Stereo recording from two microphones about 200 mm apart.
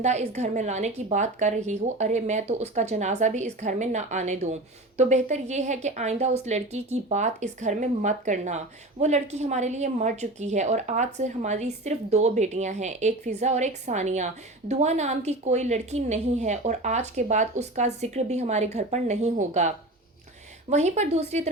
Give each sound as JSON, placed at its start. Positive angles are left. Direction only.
{"t": 0.0, "sound": "a woman's voice", "side_deg": -35}